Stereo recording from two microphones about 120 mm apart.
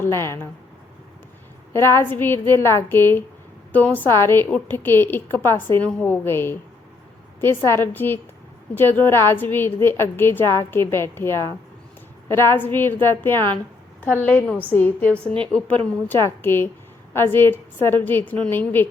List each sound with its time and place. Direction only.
0.0 s a woman's voice: 20° left (ahead or behind)
1.7 s a woman's voice: 20° left (ahead or behind)